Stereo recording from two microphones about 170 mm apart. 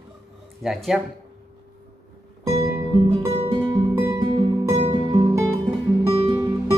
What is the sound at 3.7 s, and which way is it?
Music, 20° right (ahead or behind).